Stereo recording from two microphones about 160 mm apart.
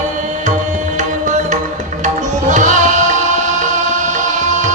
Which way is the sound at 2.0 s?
50° right (ahead or behind).